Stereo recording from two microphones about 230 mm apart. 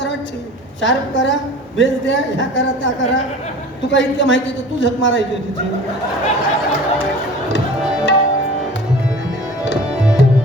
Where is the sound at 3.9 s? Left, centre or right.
Left.